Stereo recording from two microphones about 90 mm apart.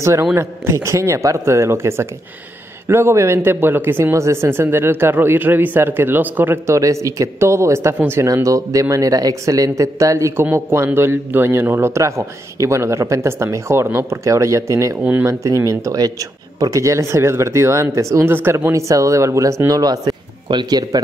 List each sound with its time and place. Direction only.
0.0 s speech: 30° right (ahead or behind)
8.3 s a man's voice: 40° right (ahead or behind); by 21.0 s 55° right (ahead or behind)